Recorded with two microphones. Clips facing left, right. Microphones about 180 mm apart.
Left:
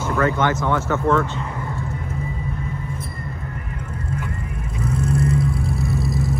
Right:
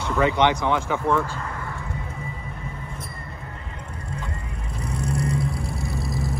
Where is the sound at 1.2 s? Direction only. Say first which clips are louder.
Left 4 dB; 20° left (ahead or behind).